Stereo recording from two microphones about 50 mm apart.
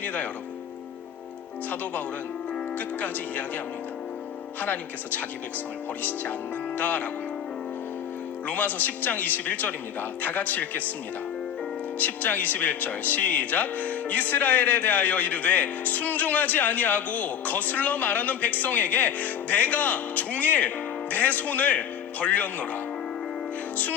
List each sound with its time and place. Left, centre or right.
0.0 s speech: left
1.7 s speech: left
4.6 s speech: left
8.4 s speech: left
11.9 s speech: left